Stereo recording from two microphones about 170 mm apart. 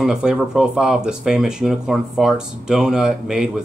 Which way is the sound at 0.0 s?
5° right (ahead or behind).